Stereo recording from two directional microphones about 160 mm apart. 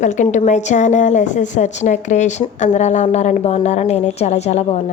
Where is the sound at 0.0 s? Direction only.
50° left (ahead or behind).